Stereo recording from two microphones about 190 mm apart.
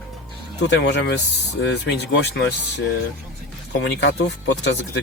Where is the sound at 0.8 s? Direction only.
65° left (ahead or behind).